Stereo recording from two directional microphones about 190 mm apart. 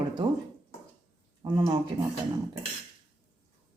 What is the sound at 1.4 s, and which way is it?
Speech, 20° right (ahead or behind).